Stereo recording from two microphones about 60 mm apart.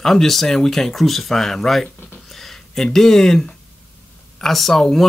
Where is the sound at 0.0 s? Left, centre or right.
Centre.